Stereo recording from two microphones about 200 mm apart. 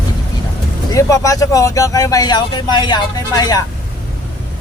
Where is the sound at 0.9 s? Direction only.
15° left (ahead or behind).